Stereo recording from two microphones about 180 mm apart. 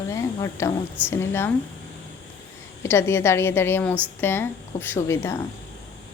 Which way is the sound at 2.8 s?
15° left (ahead or behind).